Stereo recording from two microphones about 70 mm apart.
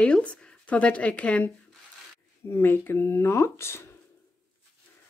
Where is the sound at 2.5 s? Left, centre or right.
Left.